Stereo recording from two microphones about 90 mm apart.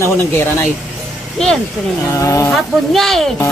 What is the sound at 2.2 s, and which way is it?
Speech, 35° left (ahead or behind).